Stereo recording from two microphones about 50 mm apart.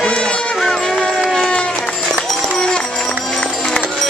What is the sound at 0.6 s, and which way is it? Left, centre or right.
Music, centre.